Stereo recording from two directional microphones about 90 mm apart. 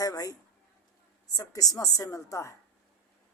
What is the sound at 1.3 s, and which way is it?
A woman's voice, 40° left (ahead or behind).